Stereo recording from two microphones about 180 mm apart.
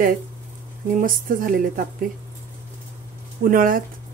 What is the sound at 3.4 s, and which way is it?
Speech, 50° right (ahead or behind).